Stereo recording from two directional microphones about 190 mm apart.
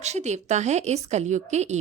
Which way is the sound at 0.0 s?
35° right (ahead or behind).